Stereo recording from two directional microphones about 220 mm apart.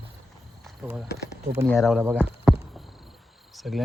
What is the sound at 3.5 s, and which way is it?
Cricket, centre (ahead or behind).